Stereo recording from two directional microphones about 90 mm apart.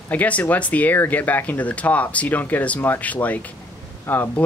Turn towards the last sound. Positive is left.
turn(degrees=20)  # may be behind; listen again after turning